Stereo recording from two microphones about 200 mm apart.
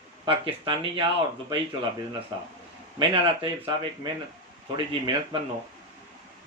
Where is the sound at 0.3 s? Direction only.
25° right (ahead or behind).